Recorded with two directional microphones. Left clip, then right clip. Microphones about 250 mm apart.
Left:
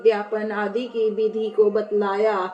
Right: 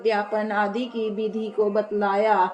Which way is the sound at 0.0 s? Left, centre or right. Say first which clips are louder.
Left 3 dB; right.